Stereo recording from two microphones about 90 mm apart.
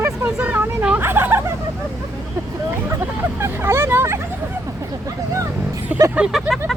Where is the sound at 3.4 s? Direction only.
30° right (ahead or behind).